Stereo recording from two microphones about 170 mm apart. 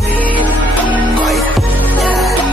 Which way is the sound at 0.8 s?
5° left (ahead or behind).